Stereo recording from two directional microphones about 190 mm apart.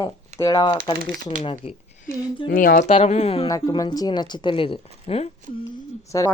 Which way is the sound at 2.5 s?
50° left (ahead or behind).